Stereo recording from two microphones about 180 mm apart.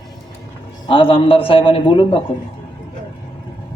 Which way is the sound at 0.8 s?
30° left (ahead or behind).